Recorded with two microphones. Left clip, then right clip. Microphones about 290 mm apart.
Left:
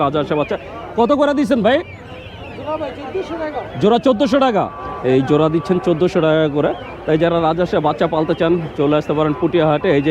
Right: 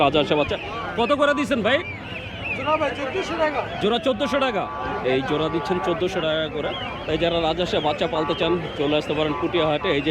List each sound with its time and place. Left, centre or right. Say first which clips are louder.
0.0 s speech: left 2 dB; centre
0.5 s a man's voice: left 5 dB; left
3.8 s speech: left 11 dB; left
7.1 s a man's voice: left 7 dB; left